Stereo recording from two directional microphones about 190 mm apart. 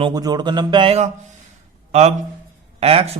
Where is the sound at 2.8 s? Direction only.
30° right (ahead or behind).